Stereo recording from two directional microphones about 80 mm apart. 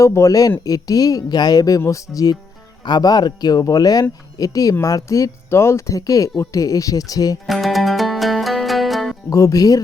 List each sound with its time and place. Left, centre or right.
0.0 s speech: left
1.8 s speech: left
2.8 s speech: left
7.4 s music: centre
9.3 s speech: left